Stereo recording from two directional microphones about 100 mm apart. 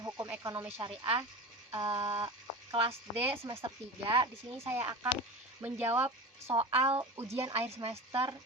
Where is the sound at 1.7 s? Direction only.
35° right (ahead or behind).